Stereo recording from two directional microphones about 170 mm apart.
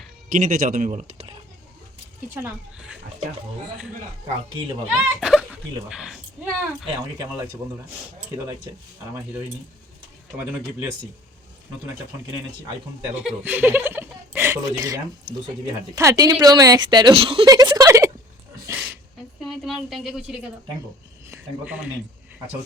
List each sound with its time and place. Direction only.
0.3 s speech: 50° right (ahead or behind)
2.3 s speech: 10° right (ahead or behind)
4.9 s speech: 5° right (ahead or behind)
13.2 s speech: 10° right (ahead or behind)
18.7 s a sound: 5° right (ahead or behind)
19.5 s speech: centre (ahead or behind)
21.2 s a sound: 10° right (ahead or behind)